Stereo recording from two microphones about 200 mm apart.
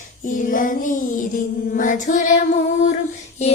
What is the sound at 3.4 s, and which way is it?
Female singing, 35° left (ahead or behind).